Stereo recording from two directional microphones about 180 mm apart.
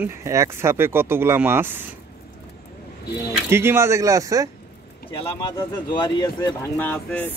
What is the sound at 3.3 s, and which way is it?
Speech, 15° right (ahead or behind).